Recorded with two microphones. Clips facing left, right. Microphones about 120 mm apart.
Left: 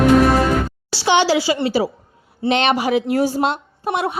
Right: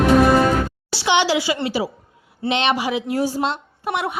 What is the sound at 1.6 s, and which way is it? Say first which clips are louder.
A woman's voice: left 4 dB; 40° left (ahead or behind).